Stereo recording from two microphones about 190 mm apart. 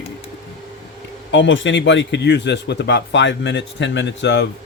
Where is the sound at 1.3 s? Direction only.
75° left (ahead or behind).